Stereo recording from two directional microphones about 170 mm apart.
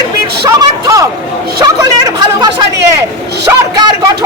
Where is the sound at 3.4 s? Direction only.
20° right (ahead or behind).